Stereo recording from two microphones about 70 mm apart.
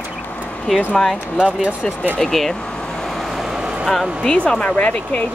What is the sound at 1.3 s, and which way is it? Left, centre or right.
Speech, centre.